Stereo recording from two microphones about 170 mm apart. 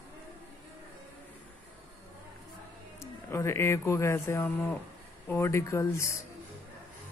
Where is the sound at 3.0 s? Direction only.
15° left (ahead or behind).